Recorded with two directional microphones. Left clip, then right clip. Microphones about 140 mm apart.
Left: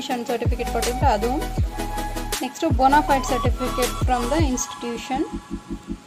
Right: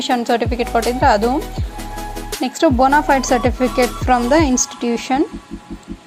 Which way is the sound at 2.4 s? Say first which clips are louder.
Right 6 dB; 20° right (ahead or behind).